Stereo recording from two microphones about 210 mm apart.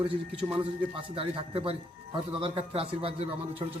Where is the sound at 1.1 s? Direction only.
25° right (ahead or behind).